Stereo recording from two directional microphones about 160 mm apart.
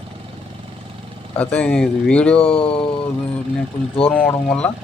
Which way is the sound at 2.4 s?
35° left (ahead or behind).